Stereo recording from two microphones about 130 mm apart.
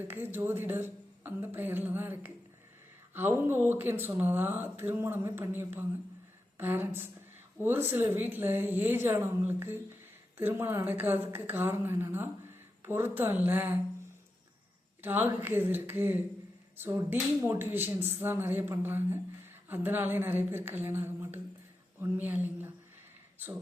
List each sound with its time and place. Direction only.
0.0 s speech: 15° right (ahead or behind)
15.0 s speech: 15° right (ahead or behind)